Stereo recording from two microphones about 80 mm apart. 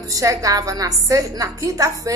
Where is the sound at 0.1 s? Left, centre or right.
Right.